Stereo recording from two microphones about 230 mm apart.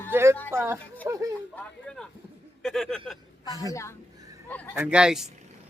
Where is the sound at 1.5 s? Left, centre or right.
Centre.